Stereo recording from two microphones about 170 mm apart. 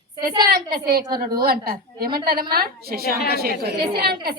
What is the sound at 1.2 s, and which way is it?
A woman's voice, 60° right (ahead or behind).